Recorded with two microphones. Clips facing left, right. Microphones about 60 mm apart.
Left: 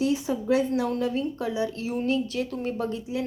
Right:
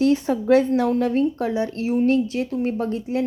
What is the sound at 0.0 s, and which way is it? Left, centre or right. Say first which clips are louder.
A woman's voice: right 6 dB; right.